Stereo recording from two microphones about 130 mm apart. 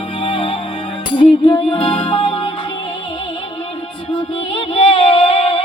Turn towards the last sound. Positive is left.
turn(degrees=45)  # may be behind; listen again after turning